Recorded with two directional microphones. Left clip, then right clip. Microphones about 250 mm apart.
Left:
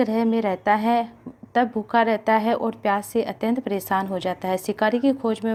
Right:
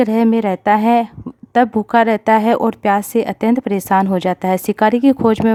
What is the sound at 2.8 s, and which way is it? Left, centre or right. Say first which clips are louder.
A woman's voice: right 7 dB; right.